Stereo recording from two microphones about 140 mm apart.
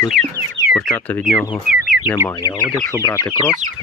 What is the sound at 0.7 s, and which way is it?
Speech, 5° left (ahead or behind).